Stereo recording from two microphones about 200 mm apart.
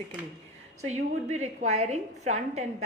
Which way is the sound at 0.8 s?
35° right (ahead or behind).